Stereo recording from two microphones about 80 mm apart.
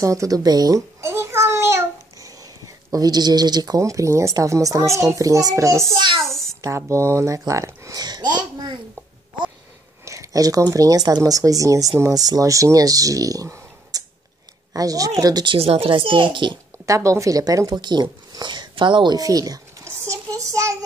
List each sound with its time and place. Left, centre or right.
0.0 s speech: right
1.0 s a sound: right
2.1 s speech: right
6.2 s a sound: centre
6.7 s speech: right
8.0 s babbling: right
10.0 s speech: right
15.4 s a child's voice: right
16.8 s speech: right
17.7 s speech: right
18.3 s a sound: right
19.1 s speech: right
19.8 s a sound: right